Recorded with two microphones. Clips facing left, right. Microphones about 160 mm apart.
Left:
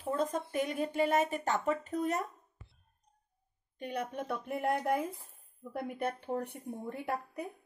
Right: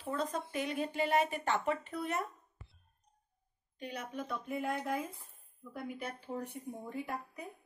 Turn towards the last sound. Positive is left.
turn(degrees=65)  # may be behind; listen again after turning